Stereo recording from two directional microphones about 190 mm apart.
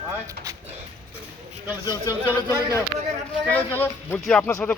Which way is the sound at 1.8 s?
20° left (ahead or behind).